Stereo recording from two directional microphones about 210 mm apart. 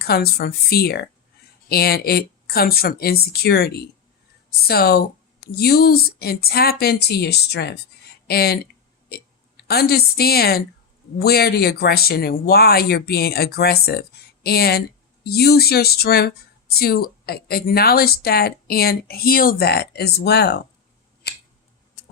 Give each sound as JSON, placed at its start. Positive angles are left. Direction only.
{"t": 0.0, "sound": "speech", "side_deg": 50}
{"t": 9.6, "sound": "speech", "side_deg": 50}